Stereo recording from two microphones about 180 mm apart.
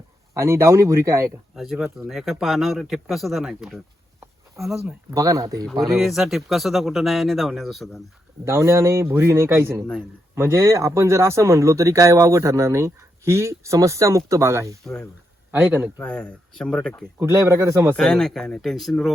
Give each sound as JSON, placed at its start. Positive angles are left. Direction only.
{"t": 0.3, "sound": "speech", "side_deg": -15}
{"t": 1.5, "sound": "speech", "side_deg": 0}
{"t": 4.6, "sound": "speech", "side_deg": -15}
{"t": 5.8, "sound": "speech", "side_deg": 0}
{"t": 8.4, "sound": "speech", "side_deg": -15}
{"t": 16.0, "sound": "speech", "side_deg": 5}
{"t": 17.2, "sound": "speech", "side_deg": -15}
{"t": 17.9, "sound": "speech", "side_deg": 5}